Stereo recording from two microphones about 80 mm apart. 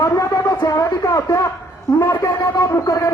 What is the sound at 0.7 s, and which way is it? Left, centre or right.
A man's voice, left.